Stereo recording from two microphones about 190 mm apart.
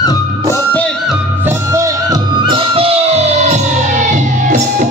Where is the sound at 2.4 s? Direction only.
30° right (ahead or behind).